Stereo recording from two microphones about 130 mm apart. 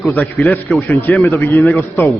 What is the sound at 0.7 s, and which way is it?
A man's voice, 20° left (ahead or behind).